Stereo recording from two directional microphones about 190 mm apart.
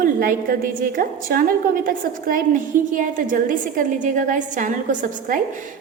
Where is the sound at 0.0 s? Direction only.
45° right (ahead or behind).